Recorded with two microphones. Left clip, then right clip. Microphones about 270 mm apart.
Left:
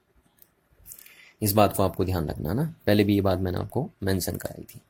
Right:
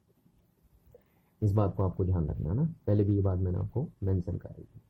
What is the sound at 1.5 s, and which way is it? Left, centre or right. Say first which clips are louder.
Speech: left 11 dB; left.